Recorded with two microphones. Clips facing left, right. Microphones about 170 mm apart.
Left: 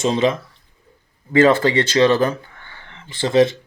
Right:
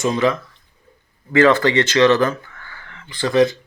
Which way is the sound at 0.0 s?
20° left (ahead or behind).